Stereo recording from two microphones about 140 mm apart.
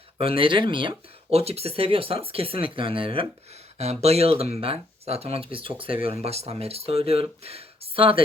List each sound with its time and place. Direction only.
0.2 s speech: 40° right (ahead or behind)